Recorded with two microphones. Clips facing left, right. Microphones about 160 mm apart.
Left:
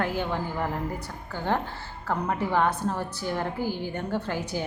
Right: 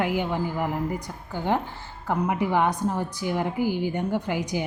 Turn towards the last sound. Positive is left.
turn(degrees=-15)  # may be behind; listen again after turning